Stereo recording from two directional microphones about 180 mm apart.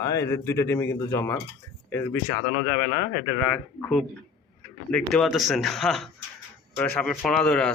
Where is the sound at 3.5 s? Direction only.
5° left (ahead or behind).